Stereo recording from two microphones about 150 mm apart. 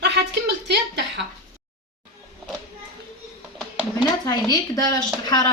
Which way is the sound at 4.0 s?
25° left (ahead or behind).